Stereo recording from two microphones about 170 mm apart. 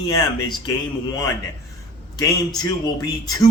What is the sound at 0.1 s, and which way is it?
Speech, 20° left (ahead or behind).